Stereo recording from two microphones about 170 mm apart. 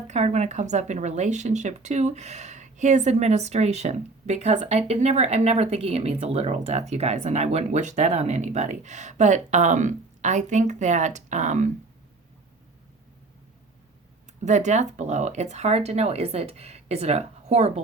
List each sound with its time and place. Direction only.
0.1 s speech: 40° right (ahead or behind)
14.4 s speech: 45° right (ahead or behind)